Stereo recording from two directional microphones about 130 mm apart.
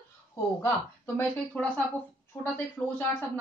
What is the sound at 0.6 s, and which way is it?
A woman's voice, 15° left (ahead or behind).